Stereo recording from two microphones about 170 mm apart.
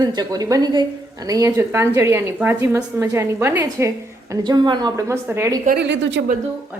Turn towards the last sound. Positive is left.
turn(degrees=-90)